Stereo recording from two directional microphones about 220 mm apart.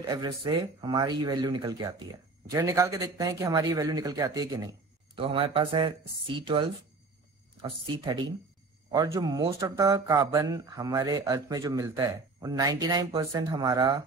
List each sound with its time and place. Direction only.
0.1 s speech: 20° right (ahead or behind)
7.6 s speech: 20° right (ahead or behind)